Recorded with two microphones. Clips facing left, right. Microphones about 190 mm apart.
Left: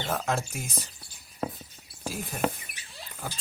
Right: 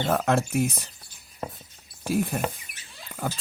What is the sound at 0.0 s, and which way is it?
Speech, 60° right (ahead or behind).